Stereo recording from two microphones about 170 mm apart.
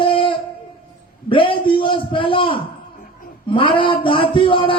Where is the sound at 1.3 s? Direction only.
30° left (ahead or behind).